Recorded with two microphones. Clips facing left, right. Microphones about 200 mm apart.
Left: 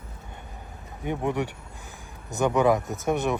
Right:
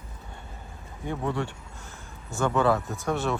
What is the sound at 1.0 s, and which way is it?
Speech, 20° left (ahead or behind).